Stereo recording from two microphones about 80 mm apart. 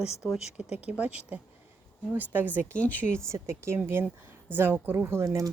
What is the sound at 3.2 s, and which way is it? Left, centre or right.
Speech, right.